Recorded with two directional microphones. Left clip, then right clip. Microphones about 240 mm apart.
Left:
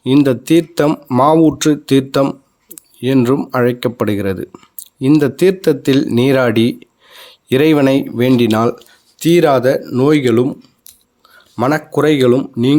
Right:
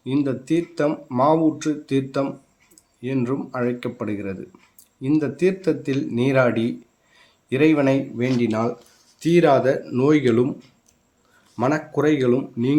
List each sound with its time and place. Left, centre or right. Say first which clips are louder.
0.0 s speech: left 11 dB; left
11.5 s speech: left 7 dB; left